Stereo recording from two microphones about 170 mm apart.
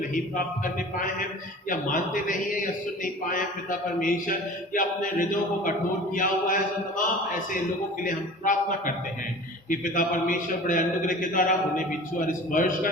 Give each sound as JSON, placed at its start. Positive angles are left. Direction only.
{"t": 0.1, "sound": "a man's voice", "side_deg": 55}
{"t": 8.0, "sound": "a man's voice", "side_deg": 50}